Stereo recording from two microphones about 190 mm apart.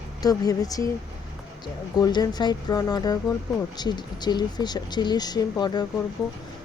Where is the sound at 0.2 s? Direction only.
20° left (ahead or behind).